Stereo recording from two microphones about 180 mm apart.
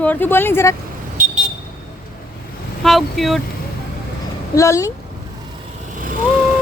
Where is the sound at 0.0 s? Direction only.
10° left (ahead or behind).